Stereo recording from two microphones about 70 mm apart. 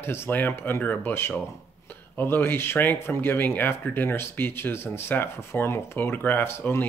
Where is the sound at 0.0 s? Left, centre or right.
Left.